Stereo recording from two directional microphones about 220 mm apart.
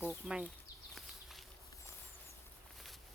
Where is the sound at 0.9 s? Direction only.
Centre (ahead or behind).